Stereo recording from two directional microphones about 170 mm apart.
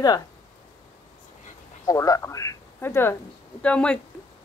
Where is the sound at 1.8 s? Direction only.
20° left (ahead or behind).